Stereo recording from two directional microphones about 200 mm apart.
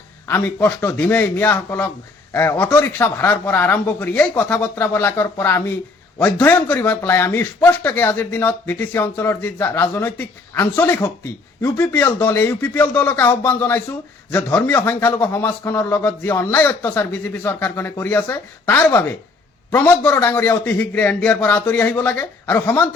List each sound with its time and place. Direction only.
0.3 s speech: 10° left (ahead or behind)